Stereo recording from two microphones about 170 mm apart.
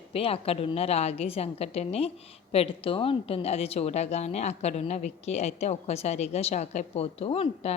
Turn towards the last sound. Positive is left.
turn(degrees=35)  # may be behind; listen again after turning